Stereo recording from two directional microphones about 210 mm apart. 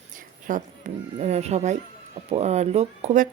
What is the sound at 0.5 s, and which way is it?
A woman's voice, 35° right (ahead or behind).